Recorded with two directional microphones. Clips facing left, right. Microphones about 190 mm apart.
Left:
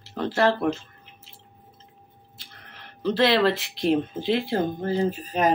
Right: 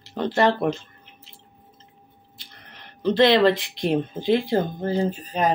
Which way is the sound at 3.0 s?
5° left (ahead or behind).